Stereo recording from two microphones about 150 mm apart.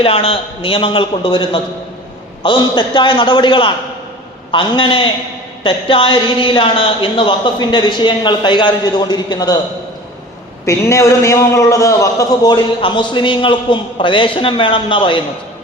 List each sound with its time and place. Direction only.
0.0 s a man's voice: 40° left (ahead or behind)
10.7 s a man's voice: 20° left (ahead or behind)